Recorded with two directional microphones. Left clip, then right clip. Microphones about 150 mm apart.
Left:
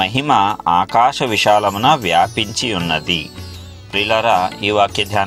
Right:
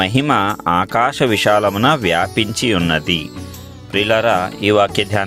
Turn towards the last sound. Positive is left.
turn(degrees=-60)  # may be behind; listen again after turning